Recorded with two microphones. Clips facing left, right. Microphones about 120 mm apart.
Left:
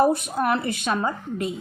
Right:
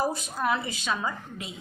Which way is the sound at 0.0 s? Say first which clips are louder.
Left 8 dB; 60° left (ahead or behind).